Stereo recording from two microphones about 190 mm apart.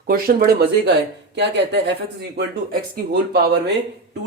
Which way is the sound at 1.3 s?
65° right (ahead or behind).